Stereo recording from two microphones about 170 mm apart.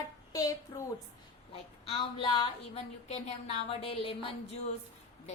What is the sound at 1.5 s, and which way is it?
A woman's voice, 30° left (ahead or behind).